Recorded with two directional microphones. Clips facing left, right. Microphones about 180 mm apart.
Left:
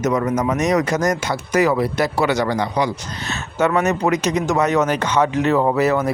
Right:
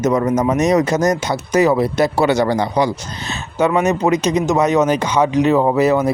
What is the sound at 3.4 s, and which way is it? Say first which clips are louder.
Speech: right 2 dB; 15° right (ahead or behind).